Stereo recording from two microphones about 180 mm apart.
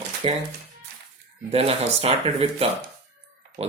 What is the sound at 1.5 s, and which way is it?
Speech, 35° right (ahead or behind).